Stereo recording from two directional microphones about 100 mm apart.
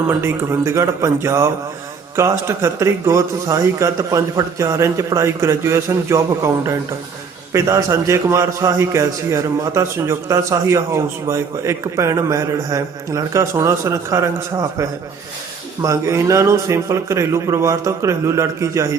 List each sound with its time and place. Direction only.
0.1 s a man's voice: 25° right (ahead or behind)